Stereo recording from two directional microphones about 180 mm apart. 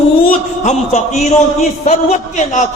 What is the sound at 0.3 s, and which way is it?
A man's voice, 40° left (ahead or behind).